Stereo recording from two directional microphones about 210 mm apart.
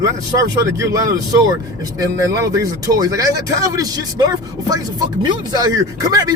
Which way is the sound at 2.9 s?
15° right (ahead or behind).